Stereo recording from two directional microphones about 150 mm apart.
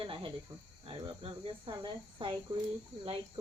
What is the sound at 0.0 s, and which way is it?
Speech, 35° right (ahead or behind).